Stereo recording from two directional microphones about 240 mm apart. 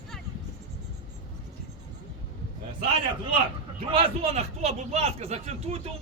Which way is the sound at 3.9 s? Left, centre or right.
Right.